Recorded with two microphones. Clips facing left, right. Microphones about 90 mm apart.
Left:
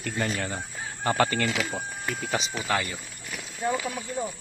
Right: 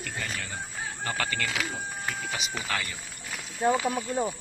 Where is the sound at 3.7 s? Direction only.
15° right (ahead or behind).